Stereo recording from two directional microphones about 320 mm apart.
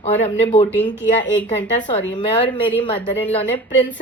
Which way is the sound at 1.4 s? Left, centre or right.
Centre.